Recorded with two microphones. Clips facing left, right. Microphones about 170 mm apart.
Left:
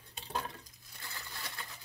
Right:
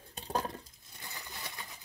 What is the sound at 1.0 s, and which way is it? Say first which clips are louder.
Crushing: right 1 dB; 15° right (ahead or behind).